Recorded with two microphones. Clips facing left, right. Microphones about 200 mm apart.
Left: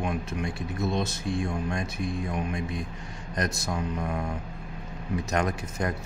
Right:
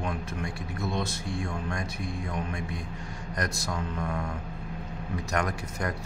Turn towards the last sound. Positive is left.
turn(degrees=25)  # may be behind; listen again after turning